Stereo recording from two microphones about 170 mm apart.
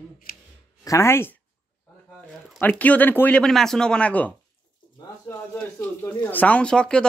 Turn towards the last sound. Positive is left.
turn(degrees=5)  # may be behind; listen again after turning